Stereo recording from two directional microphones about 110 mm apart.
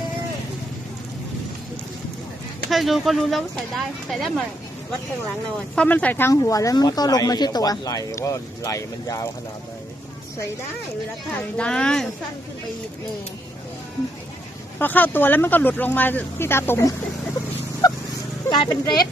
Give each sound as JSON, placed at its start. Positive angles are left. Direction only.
{"t": 2.6, "sound": "speech", "side_deg": 0}
{"t": 5.7, "sound": "speech", "side_deg": 10}
{"t": 6.3, "sound": "speech", "side_deg": 30}
{"t": 11.5, "sound": "speech", "side_deg": 10}
{"t": 14.8, "sound": "speech", "side_deg": 15}
{"t": 18.5, "sound": "speech", "side_deg": 40}